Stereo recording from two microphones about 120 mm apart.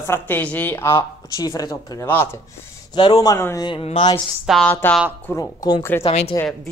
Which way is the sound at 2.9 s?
35° left (ahead or behind).